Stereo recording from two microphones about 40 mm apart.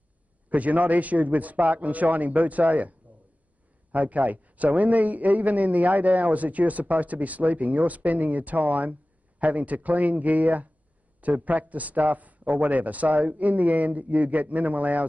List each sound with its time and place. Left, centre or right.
0.5 s a man's voice: right